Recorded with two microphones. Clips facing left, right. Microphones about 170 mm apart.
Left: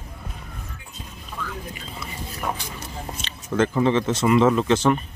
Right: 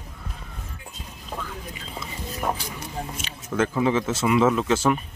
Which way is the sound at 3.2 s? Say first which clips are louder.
Left 3 dB; 5° right (ahead or behind).